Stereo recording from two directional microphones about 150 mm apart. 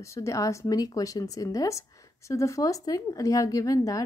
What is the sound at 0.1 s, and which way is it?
A woman's voice, 20° left (ahead or behind).